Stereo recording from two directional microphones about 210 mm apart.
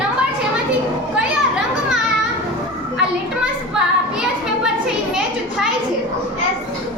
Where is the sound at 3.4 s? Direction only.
5° right (ahead or behind).